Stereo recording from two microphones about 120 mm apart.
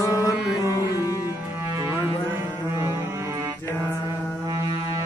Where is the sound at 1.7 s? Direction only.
20° right (ahead or behind).